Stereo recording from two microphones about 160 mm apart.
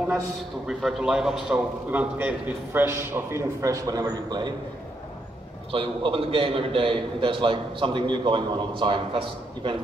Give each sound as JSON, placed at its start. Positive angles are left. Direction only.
{"t": 0.7, "sound": "a man's voice", "side_deg": 0}
{"t": 5.7, "sound": "a man's voice", "side_deg": -35}